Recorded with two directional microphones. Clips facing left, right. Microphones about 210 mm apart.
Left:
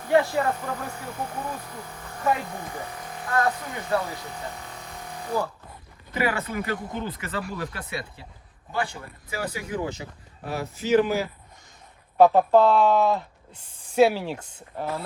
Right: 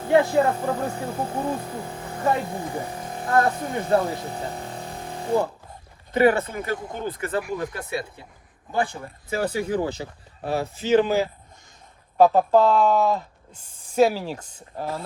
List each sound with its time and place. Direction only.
0.0 s speech: 25° right (ahead or behind)
9.3 s speech: 30° right (ahead or behind)
12.1 s speech: 5° right (ahead or behind)
13.5 s speech: 45° right (ahead or behind)
14.1 s speech: 5° right (ahead or behind)
14.4 s speech: 40° right (ahead or behind)